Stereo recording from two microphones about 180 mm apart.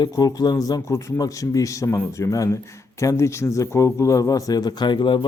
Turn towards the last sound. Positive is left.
turn(degrees=25)  # may be behind; listen again after turning